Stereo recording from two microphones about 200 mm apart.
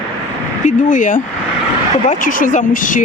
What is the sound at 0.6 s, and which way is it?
Speech, 40° left (ahead or behind).